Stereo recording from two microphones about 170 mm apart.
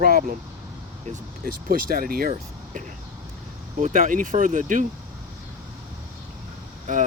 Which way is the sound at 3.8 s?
45° right (ahead or behind).